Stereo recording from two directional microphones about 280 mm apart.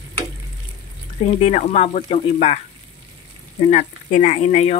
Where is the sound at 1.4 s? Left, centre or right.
Left.